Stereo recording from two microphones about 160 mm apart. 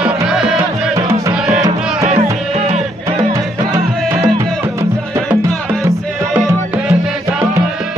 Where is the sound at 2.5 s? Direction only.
45° right (ahead or behind).